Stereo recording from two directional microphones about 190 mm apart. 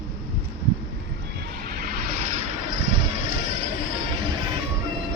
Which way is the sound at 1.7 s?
50° right (ahead or behind).